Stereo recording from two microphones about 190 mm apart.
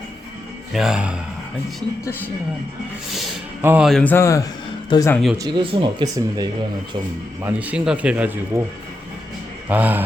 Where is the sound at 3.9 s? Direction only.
5° left (ahead or behind).